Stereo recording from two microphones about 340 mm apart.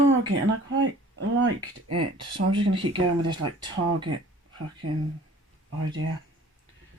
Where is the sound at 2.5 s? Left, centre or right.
Centre.